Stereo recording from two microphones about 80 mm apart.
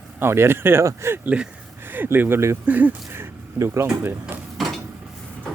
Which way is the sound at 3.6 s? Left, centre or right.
Right.